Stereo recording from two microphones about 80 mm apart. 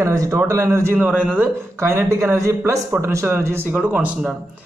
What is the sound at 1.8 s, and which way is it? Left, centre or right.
Speech, right.